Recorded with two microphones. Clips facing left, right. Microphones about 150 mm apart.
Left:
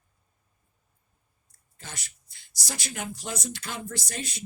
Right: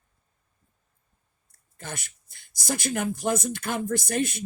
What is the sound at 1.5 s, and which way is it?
Speech, 55° right (ahead or behind).